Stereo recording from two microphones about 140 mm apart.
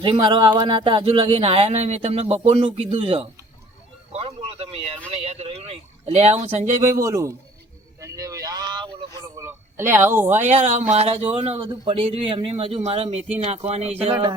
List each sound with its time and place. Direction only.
0.0 s speech: 35° right (ahead or behind)
4.1 s a sound: 40° right (ahead or behind)
5.1 s speech: 45° right (ahead or behind)
6.8 s a man's voice: 20° right (ahead or behind)
7.9 s vehicle: 25° right (ahead or behind)
9.4 s speech: 15° right (ahead or behind)
10.4 s speech: 55° right (ahead or behind)